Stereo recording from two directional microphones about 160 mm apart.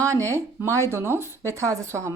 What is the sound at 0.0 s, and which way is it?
A woman's voice, 20° right (ahead or behind).